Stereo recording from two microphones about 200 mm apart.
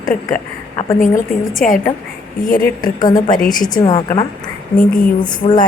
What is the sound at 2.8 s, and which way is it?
Speech, 20° left (ahead or behind).